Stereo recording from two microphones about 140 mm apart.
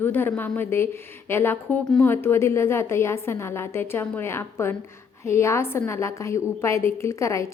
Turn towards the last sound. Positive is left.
turn(degrees=20)  # may be behind; listen again after turning